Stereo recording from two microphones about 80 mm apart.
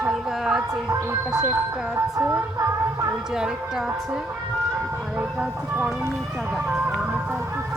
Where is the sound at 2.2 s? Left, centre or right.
Right.